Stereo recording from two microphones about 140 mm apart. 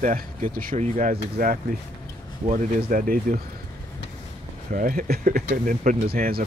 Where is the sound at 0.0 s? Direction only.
70° right (ahead or behind); by 0.7 s 90° right.